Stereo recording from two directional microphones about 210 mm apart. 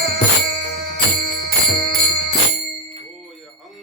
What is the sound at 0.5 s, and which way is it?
Music, 50° right (ahead or behind).